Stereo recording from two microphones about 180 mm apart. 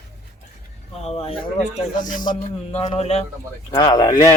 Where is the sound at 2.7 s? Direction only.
35° left (ahead or behind).